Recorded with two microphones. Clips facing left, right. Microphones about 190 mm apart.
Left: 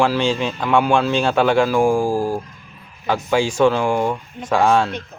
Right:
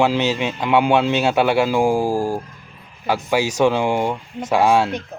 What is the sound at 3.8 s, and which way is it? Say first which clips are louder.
Speech: left 1 dB; 20° right (ahead or behind).